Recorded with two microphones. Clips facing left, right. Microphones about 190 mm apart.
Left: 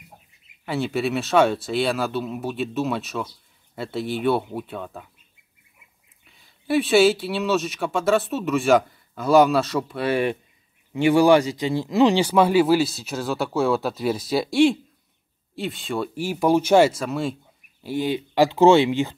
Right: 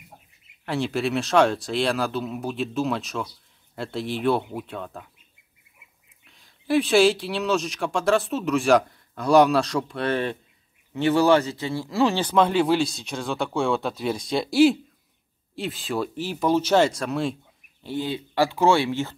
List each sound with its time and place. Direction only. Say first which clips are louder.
0.7 s speech: left 1 dB; centre (ahead or behind)
6.2 s speech: even; centre (ahead or behind)
16.2 s speech: left 4 dB; 10° left (ahead or behind)
17.8 s speech: left 4 dB; 15° left (ahead or behind)